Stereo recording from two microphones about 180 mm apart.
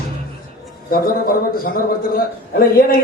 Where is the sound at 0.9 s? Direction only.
55° left (ahead or behind).